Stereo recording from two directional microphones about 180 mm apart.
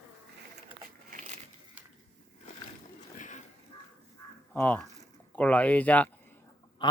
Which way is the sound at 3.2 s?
45° left (ahead or behind).